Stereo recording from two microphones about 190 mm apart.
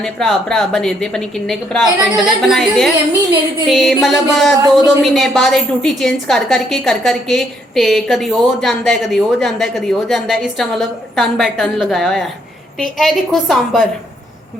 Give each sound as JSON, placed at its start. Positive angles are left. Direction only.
{"t": 0.0, "sound": "speech", "side_deg": 0}
{"t": 4.5, "sound": "speech", "side_deg": -20}
{"t": 5.0, "sound": "speech", "side_deg": 0}